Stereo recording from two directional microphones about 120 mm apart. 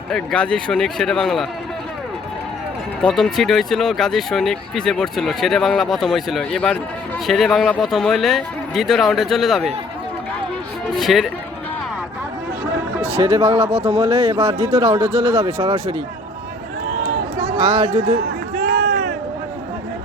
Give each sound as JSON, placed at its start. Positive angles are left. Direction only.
{"t": 0.1, "sound": "speech", "side_deg": 5}
{"t": 3.0, "sound": "speech", "side_deg": 5}
{"t": 10.9, "sound": "speech", "side_deg": 0}
{"t": 13.2, "sound": "speech", "side_deg": -25}
{"t": 15.5, "sound": "speech", "side_deg": -55}
{"t": 17.6, "sound": "speech", "side_deg": -60}